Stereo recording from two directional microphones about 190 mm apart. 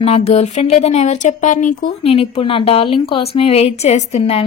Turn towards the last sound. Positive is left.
turn(degrees=35)  # may be behind; listen again after turning